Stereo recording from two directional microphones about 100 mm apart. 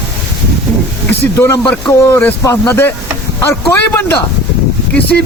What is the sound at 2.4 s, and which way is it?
Music, 30° left (ahead or behind).